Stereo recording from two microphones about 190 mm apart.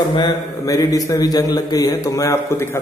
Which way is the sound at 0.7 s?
15° left (ahead or behind).